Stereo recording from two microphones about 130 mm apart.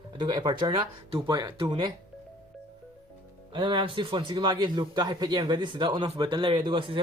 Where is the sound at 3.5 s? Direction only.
35° right (ahead or behind).